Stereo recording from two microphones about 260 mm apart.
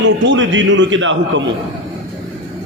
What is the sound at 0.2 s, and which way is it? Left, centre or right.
A man's voice, right.